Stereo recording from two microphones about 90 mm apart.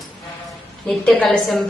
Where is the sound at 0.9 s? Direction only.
5° left (ahead or behind).